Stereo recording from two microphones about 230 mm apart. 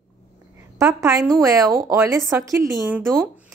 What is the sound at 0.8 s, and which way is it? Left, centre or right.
A woman's voice, centre.